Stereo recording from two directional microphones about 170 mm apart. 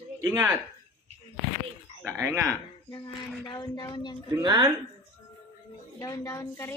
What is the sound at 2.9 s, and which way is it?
Speech, 25° left (ahead or behind).